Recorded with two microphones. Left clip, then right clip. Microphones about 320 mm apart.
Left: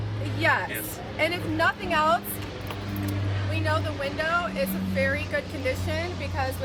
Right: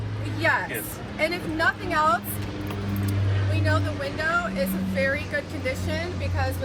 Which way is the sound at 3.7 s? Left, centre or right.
Left.